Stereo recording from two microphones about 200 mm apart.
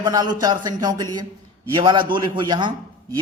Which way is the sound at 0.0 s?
20° right (ahead or behind).